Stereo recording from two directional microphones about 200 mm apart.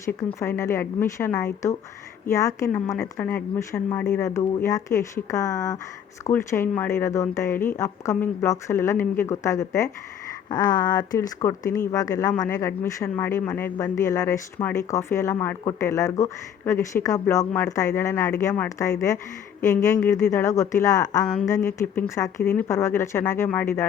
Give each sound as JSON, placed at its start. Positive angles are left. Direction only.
{"t": 0.0, "sound": "speech", "side_deg": 10}